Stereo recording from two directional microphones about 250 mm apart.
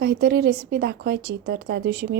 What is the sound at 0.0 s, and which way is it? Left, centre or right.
A woman's voice, right.